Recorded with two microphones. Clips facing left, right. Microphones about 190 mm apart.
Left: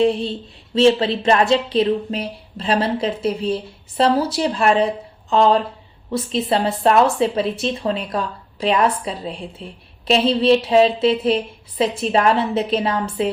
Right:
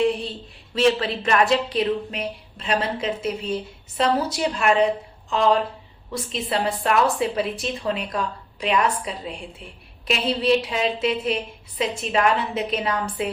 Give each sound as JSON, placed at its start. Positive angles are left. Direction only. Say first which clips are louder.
{"t": 0.0, "sound": "a woman's voice", "louder": "left 4 dB", "side_deg": 30}